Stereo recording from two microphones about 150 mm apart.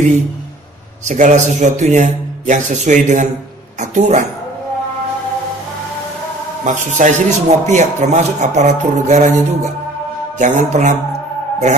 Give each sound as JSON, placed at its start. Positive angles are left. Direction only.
{"t": 1.0, "sound": "a man's voice", "side_deg": -55}
{"t": 6.6, "sound": "a man's voice", "side_deg": -55}
{"t": 10.4, "sound": "a man's voice", "side_deg": -55}